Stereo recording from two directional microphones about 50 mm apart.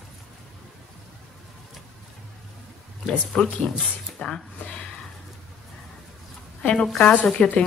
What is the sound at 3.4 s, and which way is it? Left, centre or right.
Speech, left.